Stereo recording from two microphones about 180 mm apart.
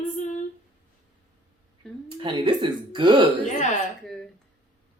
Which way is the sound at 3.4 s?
40° left (ahead or behind).